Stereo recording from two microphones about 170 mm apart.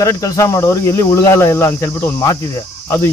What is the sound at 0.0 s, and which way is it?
Cricket, 15° left (ahead or behind).